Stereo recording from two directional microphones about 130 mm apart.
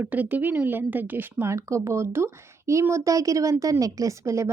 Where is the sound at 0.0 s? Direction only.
15° right (ahead or behind).